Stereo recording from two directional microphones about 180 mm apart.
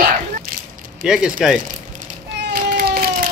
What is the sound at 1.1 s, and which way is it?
Speech, 5° right (ahead or behind).